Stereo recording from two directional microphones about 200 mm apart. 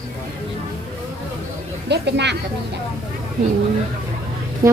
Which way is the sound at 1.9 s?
60° right (ahead or behind).